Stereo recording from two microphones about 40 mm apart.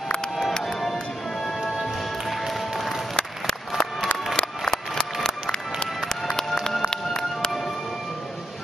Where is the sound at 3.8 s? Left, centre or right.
Centre.